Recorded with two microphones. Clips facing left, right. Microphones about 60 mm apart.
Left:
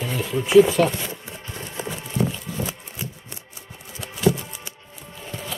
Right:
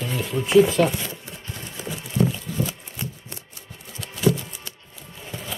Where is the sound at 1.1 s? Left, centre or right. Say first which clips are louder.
Left 1 dB; left.